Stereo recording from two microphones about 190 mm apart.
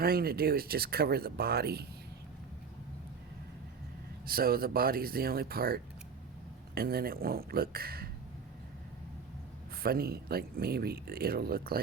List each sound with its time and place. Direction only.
0.0 s speech: 55° right (ahead or behind)
4.3 s speech: 50° right (ahead or behind)
9.7 s speech: 50° right (ahead or behind)